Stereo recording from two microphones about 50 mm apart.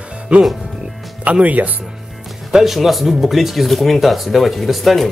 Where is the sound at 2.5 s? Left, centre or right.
Centre.